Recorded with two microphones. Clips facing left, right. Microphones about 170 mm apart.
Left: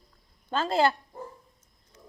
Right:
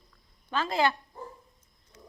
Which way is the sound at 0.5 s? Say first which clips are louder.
Left 3 dB; 30° left (ahead or behind).